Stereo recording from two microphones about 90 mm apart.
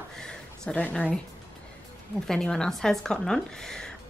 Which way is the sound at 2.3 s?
5° left (ahead or behind).